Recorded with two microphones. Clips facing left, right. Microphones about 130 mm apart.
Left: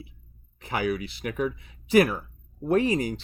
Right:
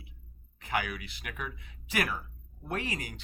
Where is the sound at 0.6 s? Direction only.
35° left (ahead or behind).